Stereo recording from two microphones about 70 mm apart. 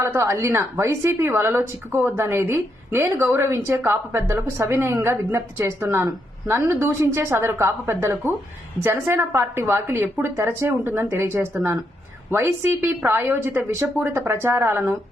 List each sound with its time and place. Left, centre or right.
0.0 s a woman's voice: right